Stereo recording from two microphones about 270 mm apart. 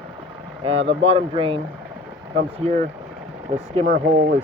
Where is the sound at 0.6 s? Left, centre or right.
Right.